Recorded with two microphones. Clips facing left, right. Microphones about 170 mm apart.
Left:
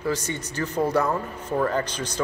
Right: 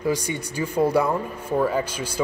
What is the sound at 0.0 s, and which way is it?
Speech, 10° right (ahead or behind).